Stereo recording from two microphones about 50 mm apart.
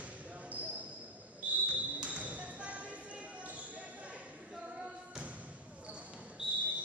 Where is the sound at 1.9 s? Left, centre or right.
Right.